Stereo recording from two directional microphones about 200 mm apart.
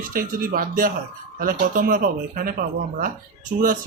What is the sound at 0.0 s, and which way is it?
A man's voice, 45° right (ahead or behind).